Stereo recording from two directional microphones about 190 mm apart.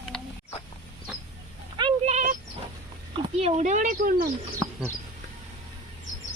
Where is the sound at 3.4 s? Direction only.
35° right (ahead or behind).